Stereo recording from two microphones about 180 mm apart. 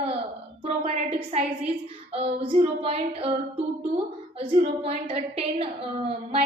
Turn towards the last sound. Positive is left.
turn(degrees=-35)  # may be behind; listen again after turning